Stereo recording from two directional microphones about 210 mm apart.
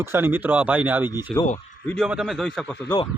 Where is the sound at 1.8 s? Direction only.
5° left (ahead or behind).